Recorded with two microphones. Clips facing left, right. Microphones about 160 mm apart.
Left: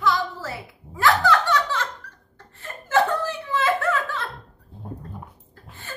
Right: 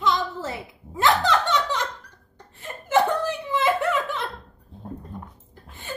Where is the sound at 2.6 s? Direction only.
15° right (ahead or behind).